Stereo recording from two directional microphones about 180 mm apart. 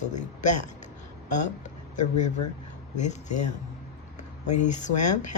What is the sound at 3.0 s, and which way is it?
Speech, 40° left (ahead or behind).